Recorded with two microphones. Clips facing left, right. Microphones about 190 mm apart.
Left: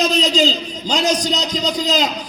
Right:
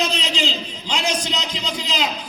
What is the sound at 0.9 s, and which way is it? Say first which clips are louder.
A man's voice: left 6 dB; 40° left (ahead or behind).